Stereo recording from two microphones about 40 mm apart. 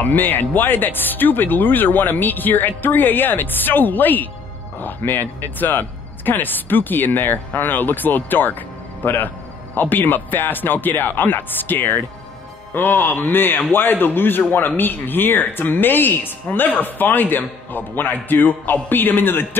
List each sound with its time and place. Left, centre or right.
0.0 s speech: left